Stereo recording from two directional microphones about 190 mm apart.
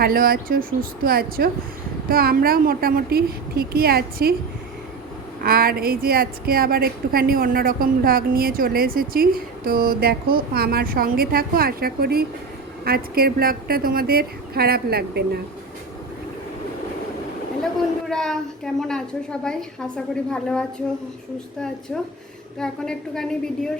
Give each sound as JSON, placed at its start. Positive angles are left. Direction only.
{"t": 0.0, "sound": "a woman's voice", "side_deg": -50}
{"t": 5.4, "sound": "a woman's voice", "side_deg": -50}
{"t": 18.1, "sound": "a woman's voice", "side_deg": 0}
{"t": 22.5, "sound": "a woman's voice", "side_deg": 5}